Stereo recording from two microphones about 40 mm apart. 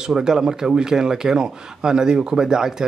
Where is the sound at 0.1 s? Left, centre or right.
Centre.